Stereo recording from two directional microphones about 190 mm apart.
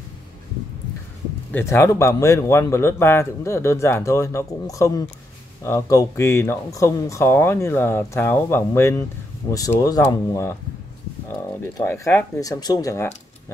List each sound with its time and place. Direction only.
1.5 s a man's voice: 15° left (ahead or behind)
11.7 s a man's voice: 15° left (ahead or behind)